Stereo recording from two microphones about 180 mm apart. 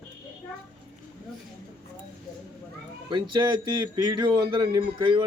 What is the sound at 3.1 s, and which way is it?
A man's voice, 25° right (ahead or behind).